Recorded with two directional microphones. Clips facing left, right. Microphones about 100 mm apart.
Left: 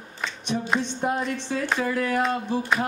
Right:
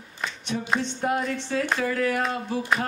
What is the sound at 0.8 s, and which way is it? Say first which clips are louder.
Music: even; 15° left (ahead or behind).